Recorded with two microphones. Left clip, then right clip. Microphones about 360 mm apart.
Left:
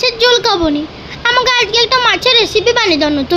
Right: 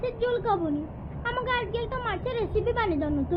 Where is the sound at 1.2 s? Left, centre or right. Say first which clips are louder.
Left 17 dB; left.